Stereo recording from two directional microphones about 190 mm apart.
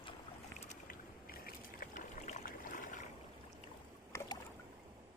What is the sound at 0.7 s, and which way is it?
Boat, 50° left (ahead or behind).